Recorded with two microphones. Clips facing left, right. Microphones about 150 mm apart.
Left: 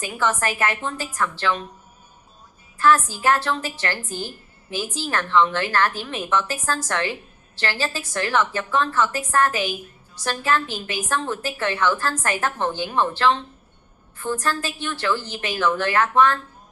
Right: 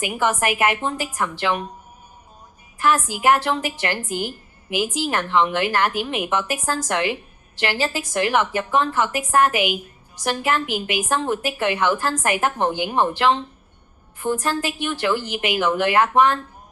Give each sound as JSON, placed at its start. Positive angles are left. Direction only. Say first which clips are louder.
{"t": 0.0, "sound": "a woman's voice", "louder": "right 2 dB", "side_deg": -15}
{"t": 2.7, "sound": "a woman's voice", "louder": "left 2 dB", "side_deg": -15}